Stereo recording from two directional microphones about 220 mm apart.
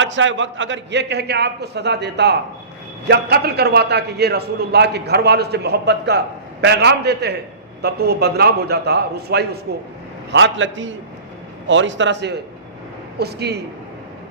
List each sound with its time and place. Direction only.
0.0 s a man's voice: 55° right (ahead or behind)
10.3 s a man's voice: 55° right (ahead or behind)